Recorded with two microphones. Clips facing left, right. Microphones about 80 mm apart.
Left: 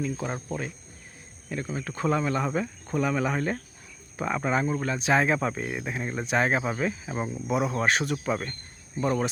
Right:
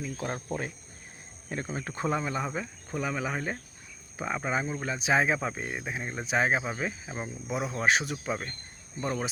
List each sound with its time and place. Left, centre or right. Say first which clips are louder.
0.0 s speech: left 4 dB; centre
1.5 s speech: left 2 dB; right
2.0 s speech: left 4 dB; centre
9.0 s speech: left 6 dB; centre